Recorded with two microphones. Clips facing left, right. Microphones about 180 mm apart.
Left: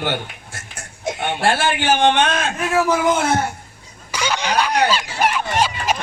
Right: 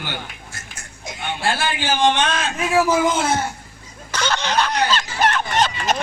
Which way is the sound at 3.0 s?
55° left (ahead or behind).